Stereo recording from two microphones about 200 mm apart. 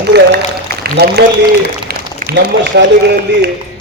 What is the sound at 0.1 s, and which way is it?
A man's voice, 55° right (ahead or behind).